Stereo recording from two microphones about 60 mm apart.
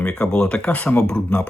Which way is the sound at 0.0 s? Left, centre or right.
Centre.